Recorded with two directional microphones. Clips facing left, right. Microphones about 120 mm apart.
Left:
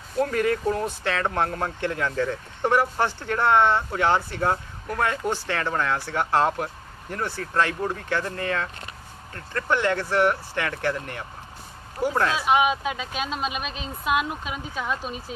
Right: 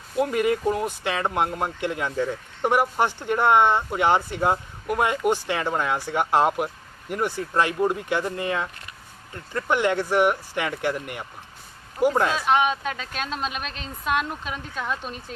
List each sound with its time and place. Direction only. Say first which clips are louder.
0.2 s speech: right 1 dB; 15° right (ahead or behind)
12.3 s speech: even; 5° left (ahead or behind)